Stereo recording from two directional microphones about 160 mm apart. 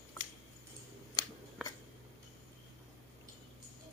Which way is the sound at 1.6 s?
Centre (ahead or behind).